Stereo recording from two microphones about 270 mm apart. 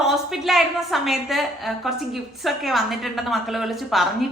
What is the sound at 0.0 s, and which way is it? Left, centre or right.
Speech, centre.